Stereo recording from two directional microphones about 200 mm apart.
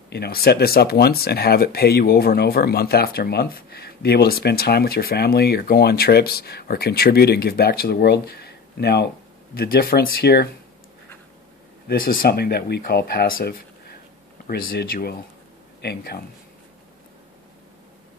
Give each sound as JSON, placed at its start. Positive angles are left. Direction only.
{"t": 0.1, "sound": "speech", "side_deg": 50}
{"t": 11.9, "sound": "speech", "side_deg": 45}